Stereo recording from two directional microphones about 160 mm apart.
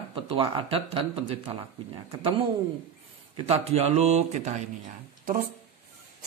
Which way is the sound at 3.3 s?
40° right (ahead or behind).